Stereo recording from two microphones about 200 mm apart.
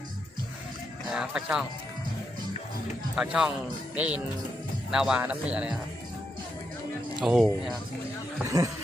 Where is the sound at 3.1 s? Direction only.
5° right (ahead or behind).